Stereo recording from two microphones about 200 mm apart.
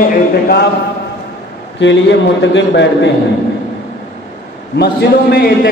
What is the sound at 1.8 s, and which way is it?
A man's voice, 65° left (ahead or behind).